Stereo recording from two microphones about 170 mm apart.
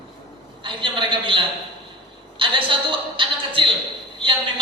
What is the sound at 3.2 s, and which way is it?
A woman's voice, 30° right (ahead or behind).